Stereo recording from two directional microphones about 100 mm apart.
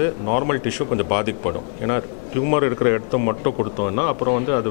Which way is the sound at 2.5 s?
15° left (ahead or behind).